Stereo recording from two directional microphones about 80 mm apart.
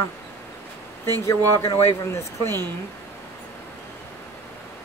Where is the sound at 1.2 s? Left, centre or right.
Left.